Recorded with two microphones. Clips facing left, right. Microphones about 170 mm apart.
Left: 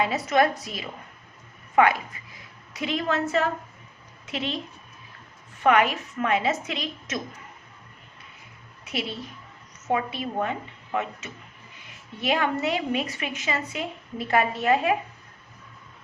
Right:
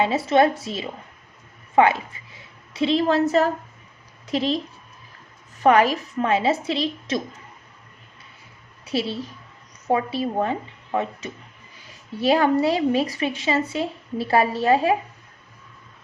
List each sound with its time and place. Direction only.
0.0 s a woman's voice: 30° right (ahead or behind)
8.8 s a woman's voice: 30° right (ahead or behind)